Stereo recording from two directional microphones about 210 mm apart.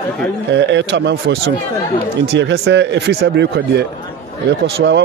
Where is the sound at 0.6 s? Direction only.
55° right (ahead or behind).